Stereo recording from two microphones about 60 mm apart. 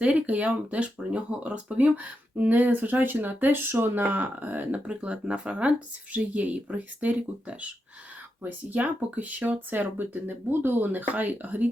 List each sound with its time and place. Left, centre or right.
0.0 s speech: right
4.9 s speech: centre